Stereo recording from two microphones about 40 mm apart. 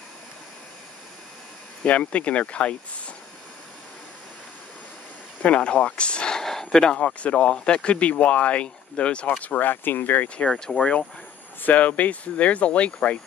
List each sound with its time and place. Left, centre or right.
1.8 s speech: left
5.4 s speech: left
6.4 s speech: centre
7.2 s speech: left
9.5 s speech: left
10.2 s speech: left
11.6 s speech: left